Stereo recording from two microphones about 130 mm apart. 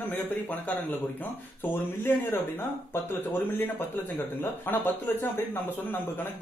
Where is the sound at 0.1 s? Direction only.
15° left (ahead or behind).